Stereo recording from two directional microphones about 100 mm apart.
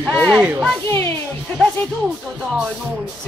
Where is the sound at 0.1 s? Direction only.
15° left (ahead or behind).